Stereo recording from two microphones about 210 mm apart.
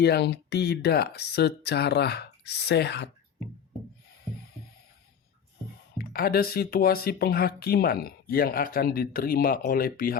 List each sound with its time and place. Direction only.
0.0 s speech: 50° left (ahead or behind)
6.0 s speech: 45° left (ahead or behind)